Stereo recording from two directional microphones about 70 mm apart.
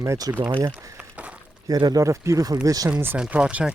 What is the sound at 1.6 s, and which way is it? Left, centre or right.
Speech, right.